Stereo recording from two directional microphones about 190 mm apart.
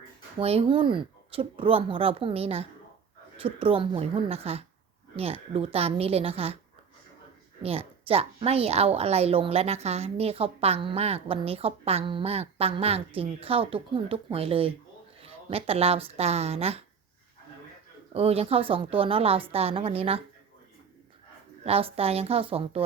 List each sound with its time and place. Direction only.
0.3 s a woman's voice: 30° right (ahead or behind)
7.6 s a woman's voice: 30° right (ahead or behind)
18.1 s a woman's voice: 30° right (ahead or behind)
21.6 s a woman's voice: 30° right (ahead or behind)